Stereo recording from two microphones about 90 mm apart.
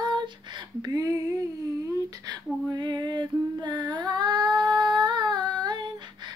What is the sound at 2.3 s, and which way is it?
Female singing, 55° right (ahead or behind).